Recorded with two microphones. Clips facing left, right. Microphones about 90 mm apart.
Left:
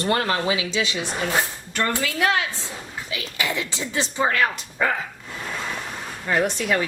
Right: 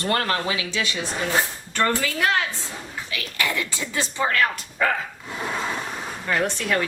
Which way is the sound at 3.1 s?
20° left (ahead or behind).